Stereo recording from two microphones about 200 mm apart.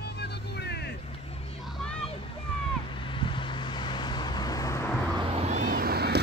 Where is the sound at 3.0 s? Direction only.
25° left (ahead or behind).